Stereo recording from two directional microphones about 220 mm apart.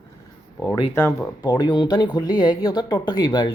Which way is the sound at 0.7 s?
10° left (ahead or behind).